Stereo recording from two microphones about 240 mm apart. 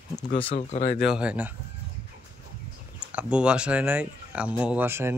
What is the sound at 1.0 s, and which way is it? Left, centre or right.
Speech, centre.